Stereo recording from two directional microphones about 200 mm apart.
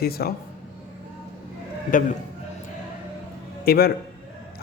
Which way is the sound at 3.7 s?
50° left (ahead or behind).